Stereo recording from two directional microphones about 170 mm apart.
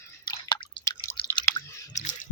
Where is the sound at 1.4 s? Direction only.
20° left (ahead or behind).